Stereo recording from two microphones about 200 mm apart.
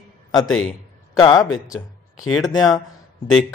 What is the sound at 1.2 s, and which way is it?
A man's voice, 20° left (ahead or behind).